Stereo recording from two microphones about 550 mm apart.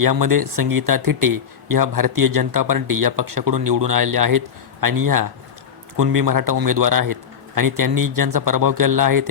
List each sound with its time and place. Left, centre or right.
0.0 s speech: right